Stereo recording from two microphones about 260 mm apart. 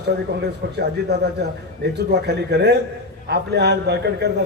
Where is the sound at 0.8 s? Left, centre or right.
Right.